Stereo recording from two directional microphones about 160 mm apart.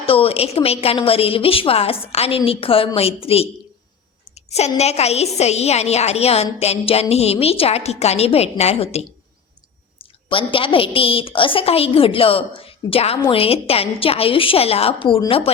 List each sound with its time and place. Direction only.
0.0 s a woman's voice: 35° left (ahead or behind)
4.4 s a sound: 40° left (ahead or behind)
4.8 s a woman's voice: 40° left (ahead or behind)